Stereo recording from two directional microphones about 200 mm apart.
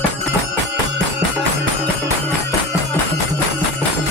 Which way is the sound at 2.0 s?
10° left (ahead or behind).